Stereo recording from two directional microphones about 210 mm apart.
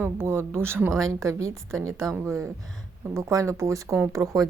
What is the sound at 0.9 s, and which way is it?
Speech, centre (ahead or behind).